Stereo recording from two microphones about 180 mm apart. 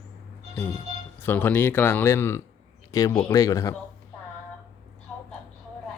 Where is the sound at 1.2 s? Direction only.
10° left (ahead or behind).